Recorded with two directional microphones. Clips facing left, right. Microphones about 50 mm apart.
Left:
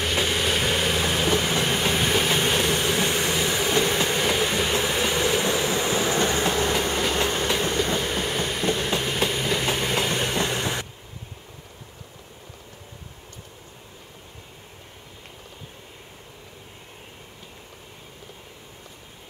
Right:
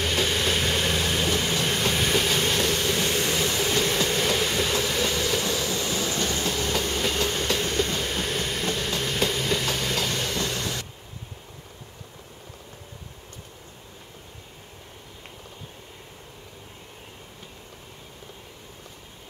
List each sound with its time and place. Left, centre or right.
0.0 s vehicle: centre; by 7.0 s left
7.0 s train: left